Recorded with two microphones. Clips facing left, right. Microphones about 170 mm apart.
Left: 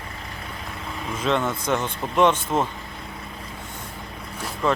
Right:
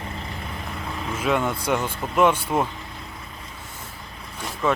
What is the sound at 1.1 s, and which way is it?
Speech, 10° right (ahead or behind).